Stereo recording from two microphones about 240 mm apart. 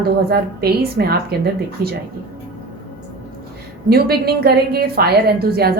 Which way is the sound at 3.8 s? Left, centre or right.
Right.